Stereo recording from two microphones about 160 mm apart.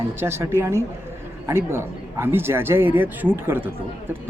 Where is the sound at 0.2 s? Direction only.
15° right (ahead or behind).